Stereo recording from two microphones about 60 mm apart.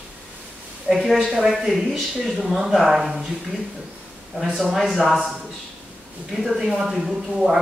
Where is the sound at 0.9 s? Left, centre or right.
Centre.